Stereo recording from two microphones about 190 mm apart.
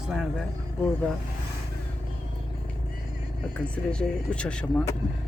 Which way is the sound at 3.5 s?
5° left (ahead or behind).